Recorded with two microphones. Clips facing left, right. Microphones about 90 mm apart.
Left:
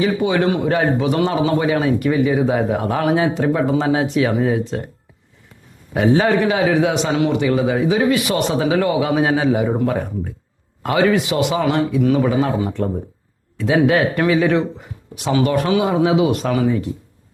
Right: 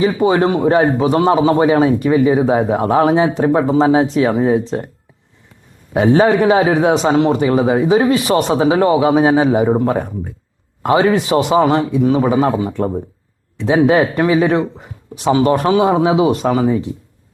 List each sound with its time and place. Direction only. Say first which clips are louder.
0.0 s a man's voice: right 4 dB; 30° right (ahead or behind)
6.1 s a man's voice: right 7 dB; 30° right (ahead or behind)